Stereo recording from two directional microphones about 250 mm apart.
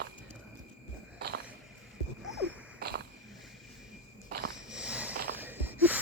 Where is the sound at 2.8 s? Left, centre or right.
Right.